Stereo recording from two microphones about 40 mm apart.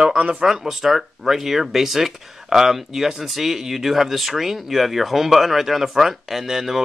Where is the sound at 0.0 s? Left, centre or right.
Right.